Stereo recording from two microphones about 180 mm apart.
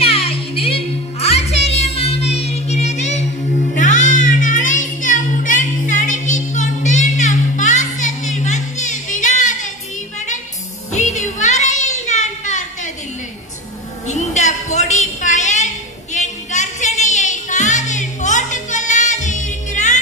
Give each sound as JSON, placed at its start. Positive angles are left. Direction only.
{"t": 0.0, "sound": "music", "side_deg": 30}
{"t": 10.9, "sound": "music", "side_deg": 40}
{"t": 14.0, "sound": "a sound", "side_deg": 40}